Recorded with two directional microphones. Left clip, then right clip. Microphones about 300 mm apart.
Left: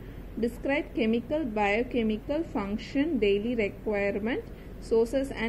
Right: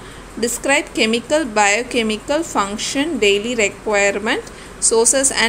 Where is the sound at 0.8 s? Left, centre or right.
Right.